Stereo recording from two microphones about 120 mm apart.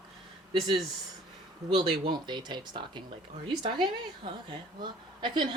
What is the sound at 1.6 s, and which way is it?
A woman's voice, 40° right (ahead or behind).